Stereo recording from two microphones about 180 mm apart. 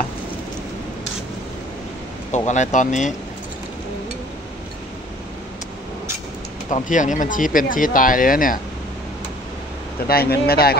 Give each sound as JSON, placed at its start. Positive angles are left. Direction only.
{"t": 2.3, "sound": "speech", "side_deg": 40}
{"t": 6.7, "sound": "speech", "side_deg": 45}
{"t": 10.0, "sound": "speech", "side_deg": 60}